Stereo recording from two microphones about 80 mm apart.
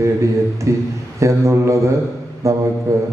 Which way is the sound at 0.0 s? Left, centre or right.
Right.